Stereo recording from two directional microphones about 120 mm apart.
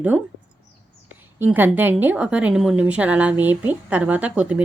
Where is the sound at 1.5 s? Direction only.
15° right (ahead or behind).